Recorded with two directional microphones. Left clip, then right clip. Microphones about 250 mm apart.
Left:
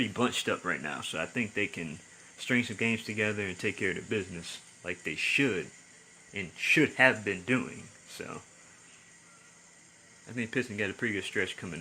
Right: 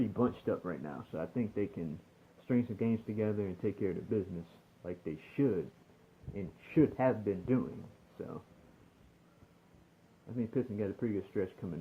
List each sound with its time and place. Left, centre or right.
0.2 s speech: left
10.3 s speech: centre